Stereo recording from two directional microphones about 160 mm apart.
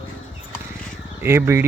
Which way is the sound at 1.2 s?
15° right (ahead or behind).